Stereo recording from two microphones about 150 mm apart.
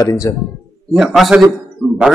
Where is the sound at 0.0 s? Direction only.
25° left (ahead or behind).